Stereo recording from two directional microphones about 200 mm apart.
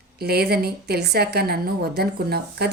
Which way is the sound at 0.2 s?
50° right (ahead or behind).